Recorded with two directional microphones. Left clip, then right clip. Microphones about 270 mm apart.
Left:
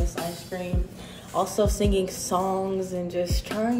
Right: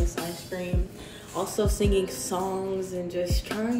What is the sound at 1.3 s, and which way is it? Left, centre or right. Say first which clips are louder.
Speech: left 4 dB; centre.